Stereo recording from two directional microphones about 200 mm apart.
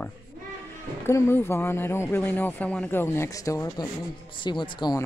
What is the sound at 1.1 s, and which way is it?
A man's voice, 10° left (ahead or behind).